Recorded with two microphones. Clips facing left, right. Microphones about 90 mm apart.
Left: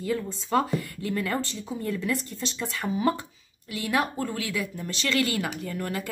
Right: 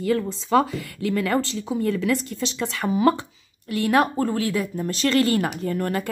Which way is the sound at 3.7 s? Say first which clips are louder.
Right 7 dB; 55° right (ahead or behind).